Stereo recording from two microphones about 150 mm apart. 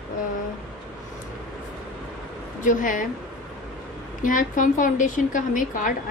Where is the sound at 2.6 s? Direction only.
60° left (ahead or behind).